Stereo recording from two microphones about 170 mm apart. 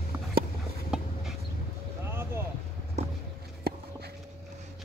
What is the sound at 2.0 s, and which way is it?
Boat, 15° right (ahead or behind).